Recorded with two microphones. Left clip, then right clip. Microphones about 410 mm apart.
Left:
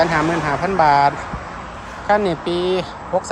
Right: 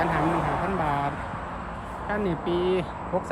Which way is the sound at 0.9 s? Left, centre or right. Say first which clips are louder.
Left 13 dB; centre.